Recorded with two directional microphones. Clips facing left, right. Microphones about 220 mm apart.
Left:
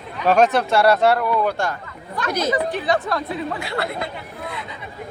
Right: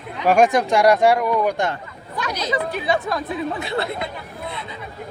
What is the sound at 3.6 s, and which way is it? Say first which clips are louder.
Speech: right 1 dB; 20° right (ahead or behind).